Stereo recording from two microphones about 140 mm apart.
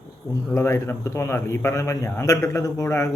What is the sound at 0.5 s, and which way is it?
A man's voice, 20° left (ahead or behind).